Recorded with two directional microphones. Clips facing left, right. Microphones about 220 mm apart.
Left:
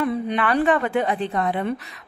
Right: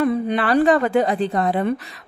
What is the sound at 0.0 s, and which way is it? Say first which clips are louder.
A woman's voice: right 3 dB; 40° right (ahead or behind).